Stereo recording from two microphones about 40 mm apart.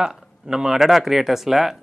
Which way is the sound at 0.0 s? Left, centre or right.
Centre.